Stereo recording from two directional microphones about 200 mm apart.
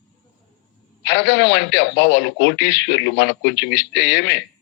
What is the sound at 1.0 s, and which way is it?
A man's voice, 60° left (ahead or behind).